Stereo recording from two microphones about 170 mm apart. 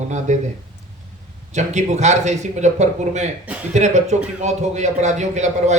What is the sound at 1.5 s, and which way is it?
A man's voice, 45° right (ahead or behind).